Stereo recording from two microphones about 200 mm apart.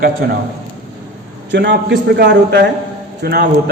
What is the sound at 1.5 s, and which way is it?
A man's voice, 60° right (ahead or behind).